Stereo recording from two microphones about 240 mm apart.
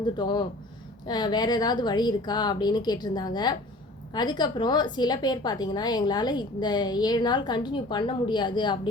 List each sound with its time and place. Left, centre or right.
0.2 s a woman's voice: centre